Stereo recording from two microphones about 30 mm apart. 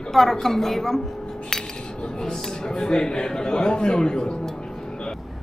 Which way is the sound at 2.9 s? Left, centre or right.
Left.